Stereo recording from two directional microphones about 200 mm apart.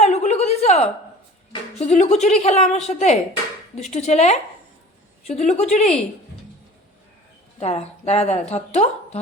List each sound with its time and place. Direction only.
0.0 s a sound: 35° left (ahead or behind)
1.8 s speech: 35° left (ahead or behind)
7.6 s speech: 30° left (ahead or behind)